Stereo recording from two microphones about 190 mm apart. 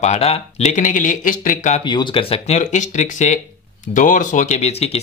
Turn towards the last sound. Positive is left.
turn(degrees=35)  # may be behind; listen again after turning